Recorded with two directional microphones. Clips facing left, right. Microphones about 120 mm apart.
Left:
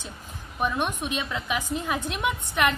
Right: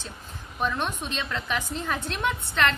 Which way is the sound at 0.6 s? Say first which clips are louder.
Left 1 dB; 15° left (ahead or behind).